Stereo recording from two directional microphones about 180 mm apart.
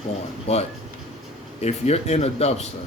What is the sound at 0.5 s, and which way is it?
Speech, 35° left (ahead or behind).